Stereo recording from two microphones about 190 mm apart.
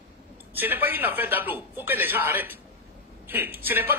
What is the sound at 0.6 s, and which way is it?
A man's voice, 10° right (ahead or behind).